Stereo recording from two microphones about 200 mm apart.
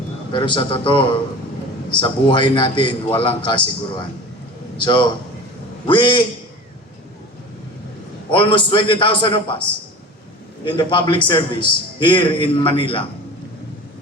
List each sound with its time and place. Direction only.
0.3 s a man's voice: 25° left (ahead or behind)
8.3 s a man's voice: 25° left (ahead or behind)
10.7 s a man's voice: 25° left (ahead or behind)